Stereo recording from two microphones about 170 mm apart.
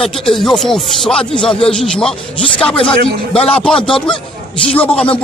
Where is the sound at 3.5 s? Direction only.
5° left (ahead or behind).